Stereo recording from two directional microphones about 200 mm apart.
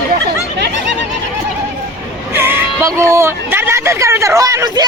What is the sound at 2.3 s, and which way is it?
Speech, 10° right (ahead or behind).